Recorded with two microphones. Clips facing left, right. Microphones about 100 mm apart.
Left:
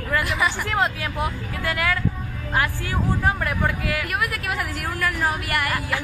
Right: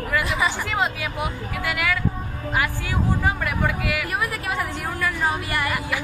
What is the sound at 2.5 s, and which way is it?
Speech, 15° right (ahead or behind).